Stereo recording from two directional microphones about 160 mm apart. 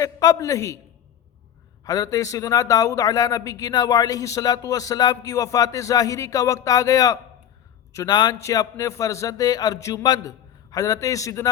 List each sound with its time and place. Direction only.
0.0 s speech: 20° left (ahead or behind)
1.8 s speech: 20° left (ahead or behind)